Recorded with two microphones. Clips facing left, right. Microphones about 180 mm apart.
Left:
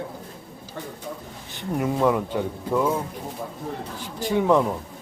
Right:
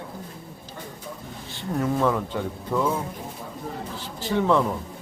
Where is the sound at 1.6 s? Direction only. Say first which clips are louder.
Left 1 dB; 15° left (ahead or behind).